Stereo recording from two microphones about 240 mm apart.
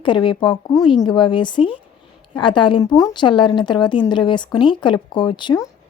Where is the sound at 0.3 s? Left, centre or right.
Centre.